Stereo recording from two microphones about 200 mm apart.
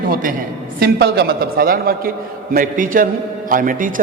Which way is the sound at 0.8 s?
55° right (ahead or behind).